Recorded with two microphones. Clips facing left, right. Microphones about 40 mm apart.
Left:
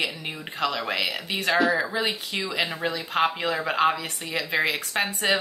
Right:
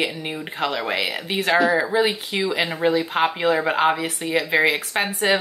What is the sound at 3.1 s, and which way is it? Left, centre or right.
Speech, centre.